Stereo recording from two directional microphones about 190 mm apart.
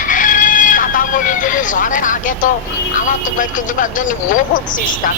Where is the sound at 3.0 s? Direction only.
45° left (ahead or behind).